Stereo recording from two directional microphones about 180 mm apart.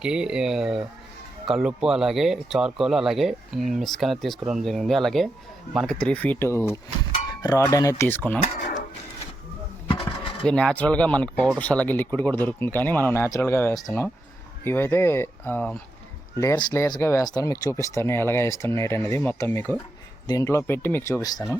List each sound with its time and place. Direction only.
0.0 s speech: 5° right (ahead or behind)
10.4 s speech: 5° left (ahead or behind)